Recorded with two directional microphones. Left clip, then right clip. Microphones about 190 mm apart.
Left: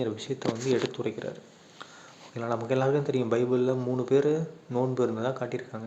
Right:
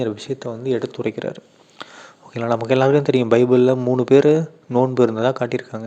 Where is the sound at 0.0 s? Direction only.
35° right (ahead or behind).